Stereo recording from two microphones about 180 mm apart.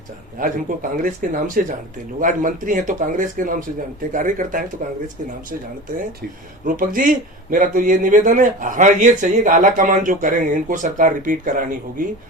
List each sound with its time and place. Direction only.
0.3 s speech: 50° right (ahead or behind)
6.7 s speech: 50° right (ahead or behind)